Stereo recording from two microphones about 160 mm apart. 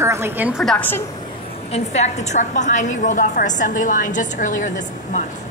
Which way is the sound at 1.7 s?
45° left (ahead or behind).